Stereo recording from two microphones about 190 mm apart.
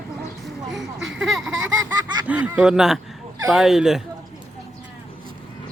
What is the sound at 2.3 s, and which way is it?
Speech, 5° right (ahead or behind).